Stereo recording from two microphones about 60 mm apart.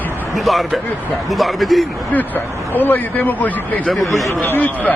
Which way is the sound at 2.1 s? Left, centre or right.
Left.